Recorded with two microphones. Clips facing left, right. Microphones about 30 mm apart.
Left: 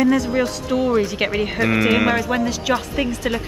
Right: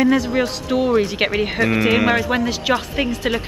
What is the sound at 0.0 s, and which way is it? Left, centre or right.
Speech, centre.